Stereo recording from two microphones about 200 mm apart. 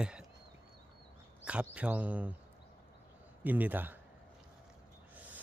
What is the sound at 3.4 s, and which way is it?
Speech, 10° right (ahead or behind).